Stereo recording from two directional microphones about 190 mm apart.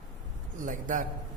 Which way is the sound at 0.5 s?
45° right (ahead or behind).